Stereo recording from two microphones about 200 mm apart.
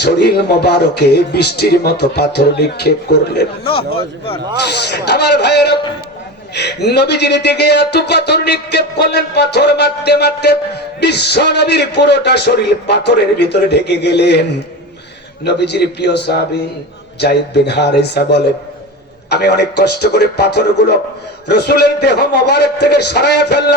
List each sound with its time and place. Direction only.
0.0 s a man's voice: 55° left (ahead or behind)
15.4 s speech: 55° left (ahead or behind)